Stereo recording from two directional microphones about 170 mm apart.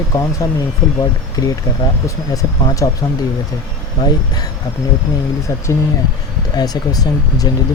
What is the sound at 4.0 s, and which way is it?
Speech, 25° left (ahead or behind).